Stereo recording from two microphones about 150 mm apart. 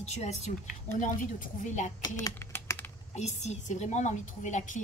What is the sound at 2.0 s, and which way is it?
Typing, 20° left (ahead or behind).